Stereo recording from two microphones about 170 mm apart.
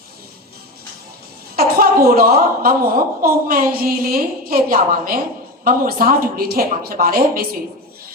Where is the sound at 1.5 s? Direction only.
60° right (ahead or behind).